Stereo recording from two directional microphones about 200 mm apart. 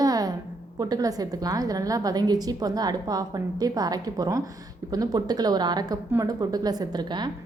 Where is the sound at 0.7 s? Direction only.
15° right (ahead or behind).